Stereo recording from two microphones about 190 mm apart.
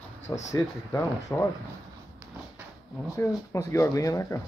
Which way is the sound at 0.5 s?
15° left (ahead or behind).